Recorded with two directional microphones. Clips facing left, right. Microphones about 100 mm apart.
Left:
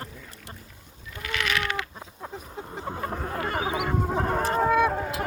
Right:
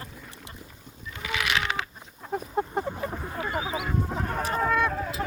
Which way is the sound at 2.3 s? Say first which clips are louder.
Right 13 dB; 55° right (ahead or behind).